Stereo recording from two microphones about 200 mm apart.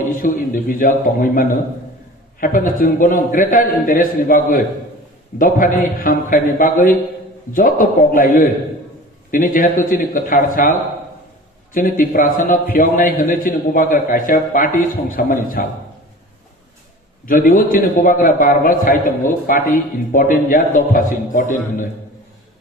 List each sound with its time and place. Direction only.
0.1 s a man's voice: 45° left (ahead or behind)
17.2 s a man's voice: 45° left (ahead or behind)